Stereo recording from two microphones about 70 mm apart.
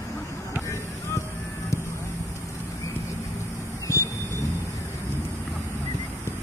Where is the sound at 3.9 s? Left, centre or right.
Left.